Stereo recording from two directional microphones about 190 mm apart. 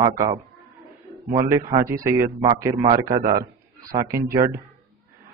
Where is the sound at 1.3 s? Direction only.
15° right (ahead or behind).